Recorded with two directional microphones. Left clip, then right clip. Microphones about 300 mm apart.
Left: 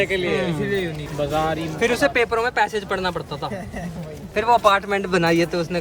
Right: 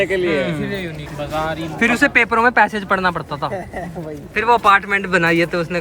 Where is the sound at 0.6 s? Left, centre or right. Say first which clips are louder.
Left 1 dB; left.